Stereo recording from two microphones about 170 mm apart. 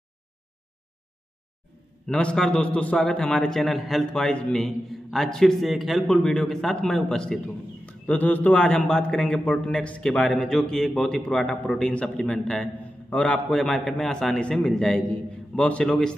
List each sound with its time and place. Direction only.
2.0 s a man's voice: 5° left (ahead or behind)